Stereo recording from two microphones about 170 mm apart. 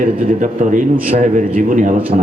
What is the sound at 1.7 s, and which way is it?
Speech, 50° right (ahead or behind).